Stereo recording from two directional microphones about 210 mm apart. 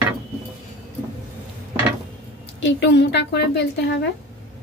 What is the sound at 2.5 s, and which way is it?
A woman's voice, 55° left (ahead or behind).